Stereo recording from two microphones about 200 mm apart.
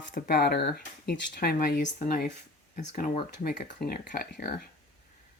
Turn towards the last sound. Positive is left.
turn(degrees=50)  # may be behind; listen again after turning